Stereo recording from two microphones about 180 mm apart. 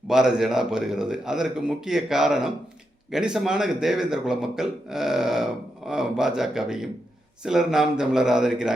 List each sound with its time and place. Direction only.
0.1 s a man's voice: centre (ahead or behind)